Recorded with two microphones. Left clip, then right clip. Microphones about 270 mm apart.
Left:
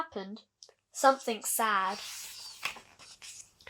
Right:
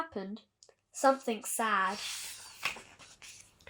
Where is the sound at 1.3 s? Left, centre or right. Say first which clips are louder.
Left 2 dB; left.